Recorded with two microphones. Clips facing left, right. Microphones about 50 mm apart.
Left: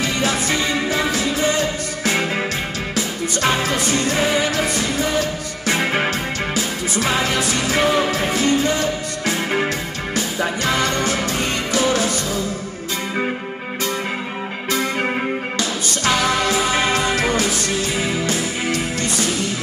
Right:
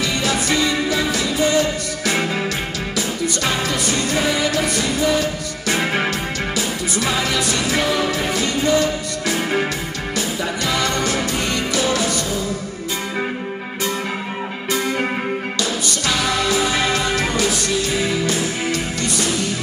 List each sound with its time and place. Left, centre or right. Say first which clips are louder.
0.0 s music: even; left
3.4 s music: left 4 dB; left
6.5 s music: even; left
16.3 s music: left 1 dB; left